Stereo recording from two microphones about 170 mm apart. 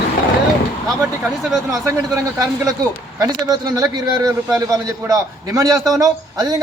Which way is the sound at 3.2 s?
25° right (ahead or behind).